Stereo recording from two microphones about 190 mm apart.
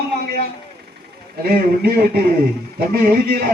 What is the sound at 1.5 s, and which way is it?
A man's voice, 55° right (ahead or behind).